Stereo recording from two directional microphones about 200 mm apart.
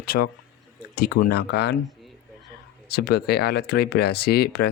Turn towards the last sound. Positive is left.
turn(degrees=50)  # may be behind; listen again after turning